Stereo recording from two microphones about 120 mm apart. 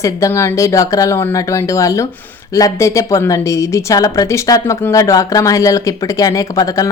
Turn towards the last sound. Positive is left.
turn(degrees=30)  # may be behind; listen again after turning